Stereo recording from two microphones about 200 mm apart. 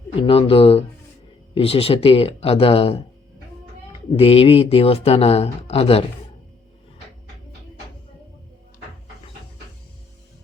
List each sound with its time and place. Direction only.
0.2 s speech: 30° left (ahead or behind)
4.2 s speech: 30° left (ahead or behind)